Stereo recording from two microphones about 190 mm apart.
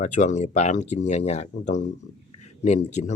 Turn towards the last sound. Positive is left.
turn(degrees=35)  # may be behind; listen again after turning